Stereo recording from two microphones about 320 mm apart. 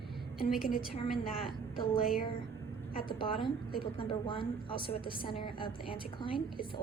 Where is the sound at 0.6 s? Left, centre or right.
Left.